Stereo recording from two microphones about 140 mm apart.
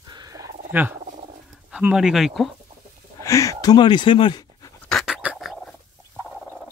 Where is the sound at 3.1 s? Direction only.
20° left (ahead or behind).